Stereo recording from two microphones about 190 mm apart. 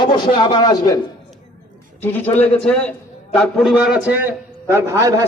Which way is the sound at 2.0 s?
10° left (ahead or behind).